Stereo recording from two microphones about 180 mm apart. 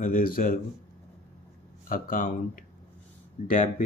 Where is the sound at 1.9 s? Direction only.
50° left (ahead or behind).